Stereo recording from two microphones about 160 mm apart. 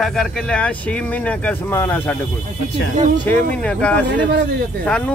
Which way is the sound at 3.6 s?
10° left (ahead or behind).